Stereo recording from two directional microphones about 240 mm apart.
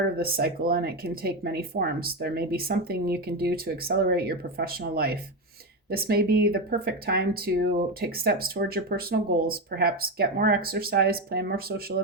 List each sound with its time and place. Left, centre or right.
0.2 s speech: right